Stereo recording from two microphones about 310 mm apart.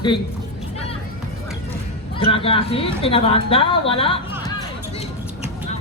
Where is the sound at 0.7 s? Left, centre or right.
Centre.